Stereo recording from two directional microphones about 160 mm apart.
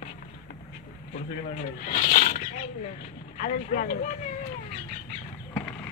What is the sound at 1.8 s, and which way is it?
Speech, 60° left (ahead or behind).